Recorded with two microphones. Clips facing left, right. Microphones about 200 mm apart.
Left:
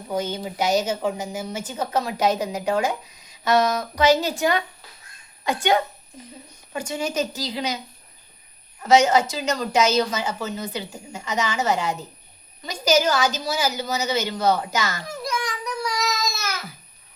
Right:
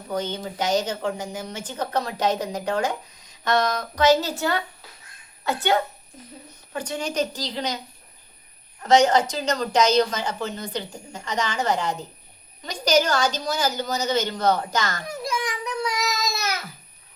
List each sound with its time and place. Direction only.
0.1 s a woman's voice: 10° left (ahead or behind)
8.8 s a woman's voice: 5° left (ahead or behind)
15.0 s child singing: 20° right (ahead or behind)